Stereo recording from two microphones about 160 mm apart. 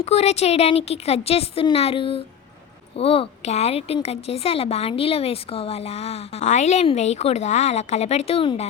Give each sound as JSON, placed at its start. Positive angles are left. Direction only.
{"t": 0.0, "sound": "a woman's voice", "side_deg": 40}